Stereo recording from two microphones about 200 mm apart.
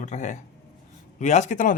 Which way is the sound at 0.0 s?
35° left (ahead or behind).